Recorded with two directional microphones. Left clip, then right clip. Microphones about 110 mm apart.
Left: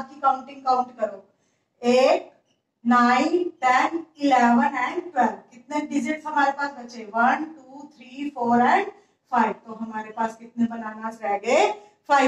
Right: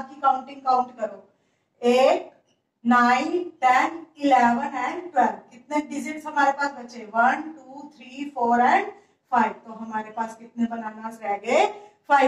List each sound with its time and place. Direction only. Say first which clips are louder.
0.0 s a woman's voice: even; 25° left (ahead or behind)